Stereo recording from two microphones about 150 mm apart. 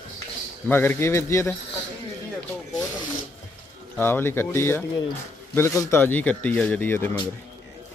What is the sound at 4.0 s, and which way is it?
Speech, 15° left (ahead or behind).